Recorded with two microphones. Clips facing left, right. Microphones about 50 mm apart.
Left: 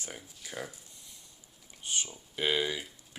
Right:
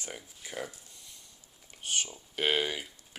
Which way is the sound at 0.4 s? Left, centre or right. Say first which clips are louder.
Right 1 dB; right.